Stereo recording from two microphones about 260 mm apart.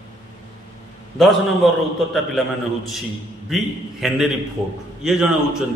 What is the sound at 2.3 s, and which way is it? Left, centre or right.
A man's voice, centre.